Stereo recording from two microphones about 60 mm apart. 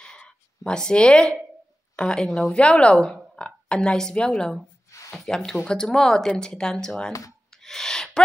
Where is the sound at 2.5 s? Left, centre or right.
Centre.